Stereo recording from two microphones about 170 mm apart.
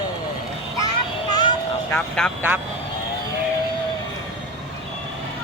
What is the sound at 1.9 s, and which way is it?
Speech, 5° left (ahead or behind).